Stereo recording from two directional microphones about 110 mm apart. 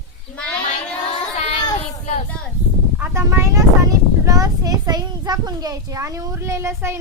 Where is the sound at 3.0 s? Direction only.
25° right (ahead or behind).